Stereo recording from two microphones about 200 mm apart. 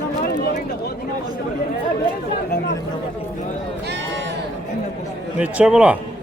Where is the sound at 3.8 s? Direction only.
60° right (ahead or behind).